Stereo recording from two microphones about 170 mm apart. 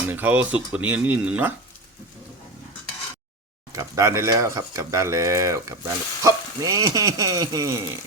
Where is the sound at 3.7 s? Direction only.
20° right (ahead or behind).